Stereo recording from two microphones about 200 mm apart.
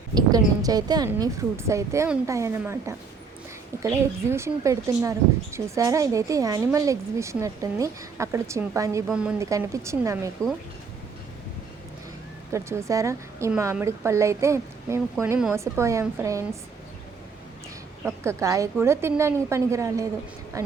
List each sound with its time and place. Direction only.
0.1 s speech: 20° right (ahead or behind)
9.0 s speech: 5° right (ahead or behind)
9.4 s speech: 15° right (ahead or behind)
10.4 s speech: 5° left (ahead or behind)
12.5 s speech: 15° right (ahead or behind)
18.0 s speech: 15° right (ahead or behind)